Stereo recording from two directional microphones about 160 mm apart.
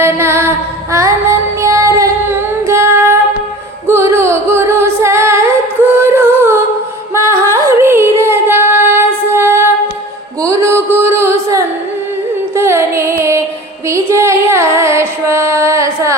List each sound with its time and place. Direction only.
0.0 s female singing: 15° right (ahead or behind)
3.8 s singing: 15° right (ahead or behind)
7.1 s female singing: 15° right (ahead or behind)
10.4 s a sound: 15° right (ahead or behind)
12.5 s music: 15° right (ahead or behind)